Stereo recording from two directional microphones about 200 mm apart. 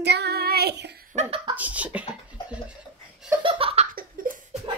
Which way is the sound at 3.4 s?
25° right (ahead or behind).